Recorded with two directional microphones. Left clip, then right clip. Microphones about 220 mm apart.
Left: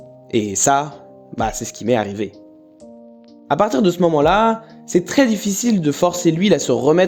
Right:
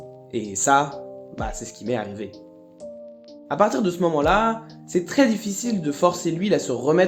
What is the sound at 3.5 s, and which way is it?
Speech, 40° left (ahead or behind).